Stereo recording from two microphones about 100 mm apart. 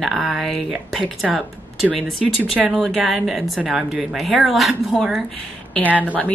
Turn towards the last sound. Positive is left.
turn(degrees=15)  # may be behind; listen again after turning